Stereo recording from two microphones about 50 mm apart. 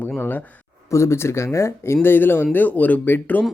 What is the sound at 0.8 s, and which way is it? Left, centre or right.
Speech, left.